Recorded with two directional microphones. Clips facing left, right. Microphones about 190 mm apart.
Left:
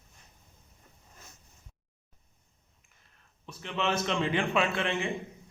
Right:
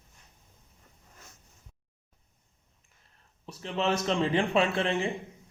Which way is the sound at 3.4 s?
35° right (ahead or behind).